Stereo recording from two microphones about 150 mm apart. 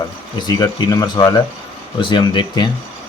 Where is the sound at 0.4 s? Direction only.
25° left (ahead or behind).